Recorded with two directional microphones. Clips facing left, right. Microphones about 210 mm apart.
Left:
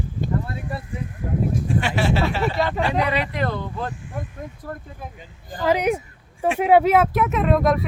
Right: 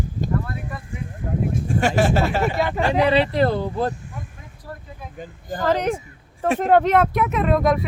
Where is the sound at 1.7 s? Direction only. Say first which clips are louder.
Right 5 dB; 45° right (ahead or behind).